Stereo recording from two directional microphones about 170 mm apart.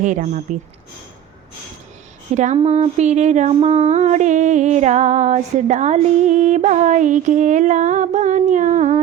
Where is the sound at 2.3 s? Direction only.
40° right (ahead or behind).